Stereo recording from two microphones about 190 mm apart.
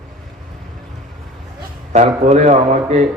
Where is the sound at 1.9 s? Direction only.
35° right (ahead or behind).